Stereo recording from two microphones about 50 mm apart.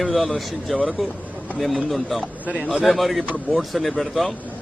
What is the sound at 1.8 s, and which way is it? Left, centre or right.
A man's voice, centre.